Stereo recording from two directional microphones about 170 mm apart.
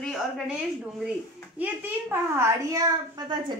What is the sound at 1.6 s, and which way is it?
A woman's voice, 10° right (ahead or behind).